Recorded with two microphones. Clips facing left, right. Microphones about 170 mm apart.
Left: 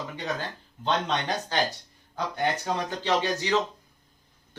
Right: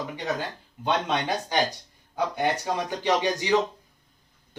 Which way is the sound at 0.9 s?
10° right (ahead or behind).